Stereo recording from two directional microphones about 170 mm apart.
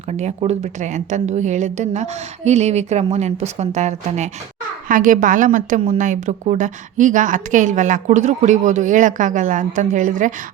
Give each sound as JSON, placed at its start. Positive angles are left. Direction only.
{"t": 0.1, "sound": "a woman's voice", "side_deg": -40}
{"t": 4.9, "sound": "a woman's voice", "side_deg": -55}